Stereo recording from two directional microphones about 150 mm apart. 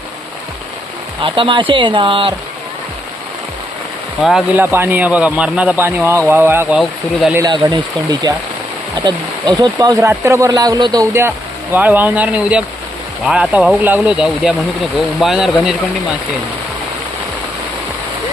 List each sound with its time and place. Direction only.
1.2 s speech: 35° right (ahead or behind)
4.2 s speech: centre (ahead or behind)
4.5 s speech: 15° right (ahead or behind)
6.7 s speech: 5° right (ahead or behind)
7.5 s speech: 30° right (ahead or behind)
11.1 s speech: 15° right (ahead or behind)